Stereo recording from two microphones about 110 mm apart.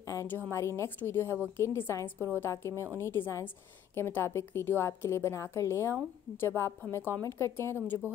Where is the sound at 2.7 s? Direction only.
25° right (ahead or behind).